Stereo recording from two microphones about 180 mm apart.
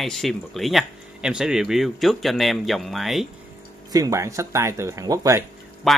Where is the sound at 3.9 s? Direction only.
15° right (ahead or behind).